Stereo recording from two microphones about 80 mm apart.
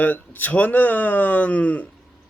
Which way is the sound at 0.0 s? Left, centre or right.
Left.